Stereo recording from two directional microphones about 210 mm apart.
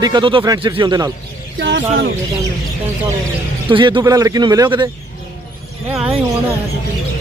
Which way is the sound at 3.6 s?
25° right (ahead or behind).